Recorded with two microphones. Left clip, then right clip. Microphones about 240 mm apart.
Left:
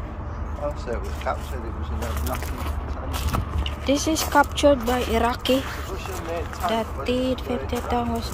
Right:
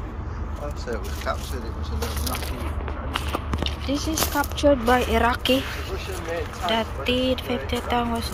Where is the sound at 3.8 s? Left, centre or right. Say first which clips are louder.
Left 5 dB; left.